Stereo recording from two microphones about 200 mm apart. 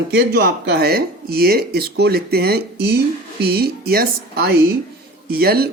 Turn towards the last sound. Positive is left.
turn(degrees=-50)  # may be behind; listen again after turning